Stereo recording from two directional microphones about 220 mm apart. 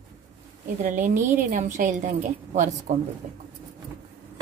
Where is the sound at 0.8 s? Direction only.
35° right (ahead or behind).